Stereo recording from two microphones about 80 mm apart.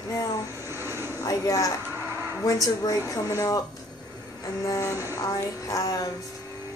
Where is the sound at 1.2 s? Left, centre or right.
Left.